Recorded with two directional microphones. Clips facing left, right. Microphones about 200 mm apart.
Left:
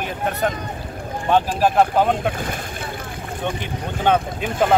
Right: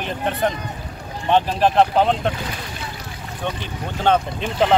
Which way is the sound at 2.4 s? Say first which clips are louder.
Left 3 dB; 50° left (ahead or behind).